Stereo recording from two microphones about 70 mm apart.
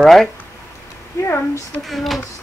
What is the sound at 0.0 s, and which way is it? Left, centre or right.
Speech, centre.